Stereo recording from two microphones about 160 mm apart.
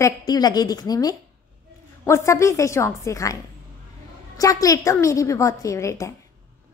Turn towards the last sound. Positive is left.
turn(degrees=20)  # may be behind; listen again after turning